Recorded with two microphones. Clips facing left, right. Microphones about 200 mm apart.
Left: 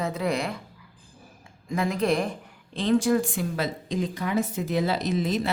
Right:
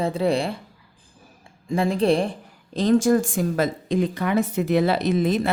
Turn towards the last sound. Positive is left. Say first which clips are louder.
# right 5 dB
turn(degrees=-55)  # may be behind; listen again after turning